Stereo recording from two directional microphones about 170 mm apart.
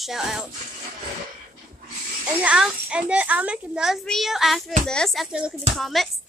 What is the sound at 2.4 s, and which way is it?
Speech, 5° right (ahead or behind).